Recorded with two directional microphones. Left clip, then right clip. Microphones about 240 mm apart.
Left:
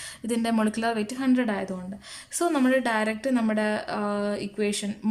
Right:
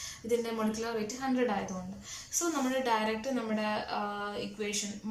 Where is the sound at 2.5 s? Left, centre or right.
Left.